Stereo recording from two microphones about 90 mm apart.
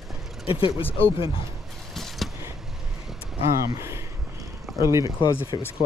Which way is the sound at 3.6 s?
35° right (ahead or behind).